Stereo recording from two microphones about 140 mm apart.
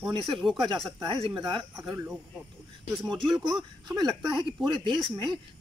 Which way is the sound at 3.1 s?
Centre (ahead or behind).